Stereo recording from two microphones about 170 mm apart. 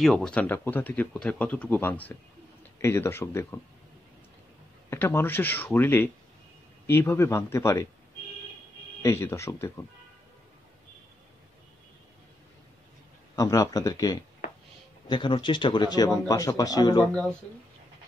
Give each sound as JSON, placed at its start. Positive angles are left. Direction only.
{"t": 0.0, "sound": "speech", "side_deg": 5}
{"t": 4.8, "sound": "speech", "side_deg": 15}
{"t": 9.0, "sound": "speech", "side_deg": 15}
{"t": 13.4, "sound": "a man's voice", "side_deg": 20}
{"t": 17.0, "sound": "speech", "side_deg": 5}